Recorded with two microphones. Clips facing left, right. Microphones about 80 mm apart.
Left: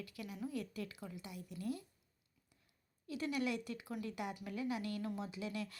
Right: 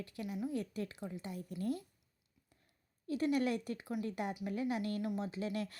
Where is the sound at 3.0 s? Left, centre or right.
Right.